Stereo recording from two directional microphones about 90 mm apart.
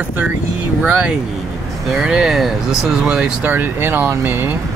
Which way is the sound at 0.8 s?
15° right (ahead or behind).